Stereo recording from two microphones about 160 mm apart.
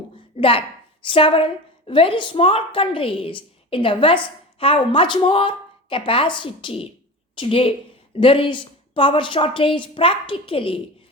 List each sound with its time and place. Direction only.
0.3 s a woman's voice: 35° left (ahead or behind)